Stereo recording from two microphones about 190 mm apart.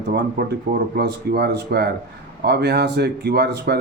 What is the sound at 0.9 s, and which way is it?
Speech, 55° right (ahead or behind).